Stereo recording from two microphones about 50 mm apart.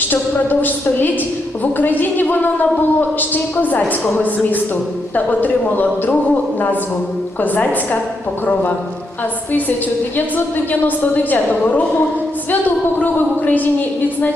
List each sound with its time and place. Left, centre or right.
0.1 s a woman's voice: left
5.1 s a woman's voice: left
9.5 s a woman's voice: left